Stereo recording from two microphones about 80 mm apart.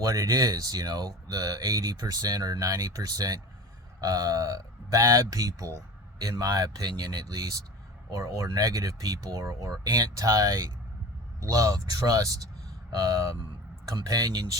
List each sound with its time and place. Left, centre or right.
0.0 s speech: right